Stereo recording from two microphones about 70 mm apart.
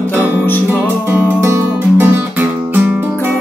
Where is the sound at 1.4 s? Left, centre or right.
Right.